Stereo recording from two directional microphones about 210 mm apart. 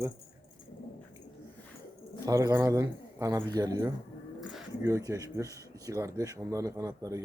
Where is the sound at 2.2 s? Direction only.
15° right (ahead or behind).